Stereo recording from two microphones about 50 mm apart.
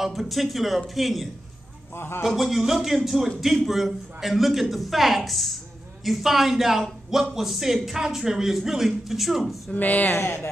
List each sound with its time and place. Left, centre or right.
0.0 s a man's voice: centre
2.0 s speech: left
2.2 s a man's voice: centre
9.8 s speech: left
10.1 s speech: left